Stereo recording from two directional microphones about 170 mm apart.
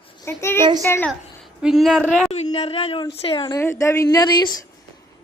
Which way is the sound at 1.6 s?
Centre (ahead or behind).